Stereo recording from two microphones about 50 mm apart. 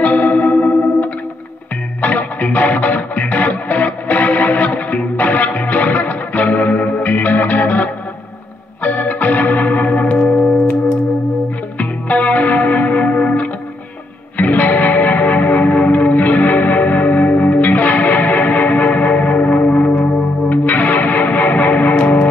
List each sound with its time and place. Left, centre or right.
0.0 s music: left
2.0 s music: left
11.8 s music: left